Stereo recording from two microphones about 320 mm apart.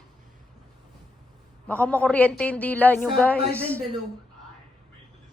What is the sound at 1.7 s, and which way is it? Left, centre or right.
A woman's voice, centre.